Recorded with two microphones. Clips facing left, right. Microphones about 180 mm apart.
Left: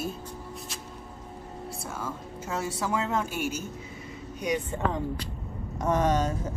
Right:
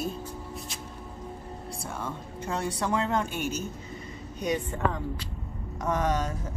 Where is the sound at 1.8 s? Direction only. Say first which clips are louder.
Right 1 dB; 5° left (ahead or behind).